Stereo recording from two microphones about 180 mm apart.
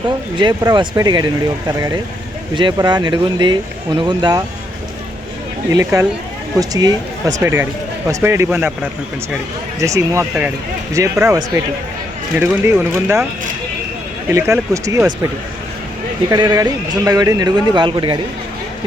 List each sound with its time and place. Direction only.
0.3 s speech: 25° right (ahead or behind)
5.7 s a man's voice: 15° right (ahead or behind)
9.8 s a man's voice: 15° right (ahead or behind)
14.3 s a man's voice: 15° right (ahead or behind)
16.3 s speech: 20° right (ahead or behind)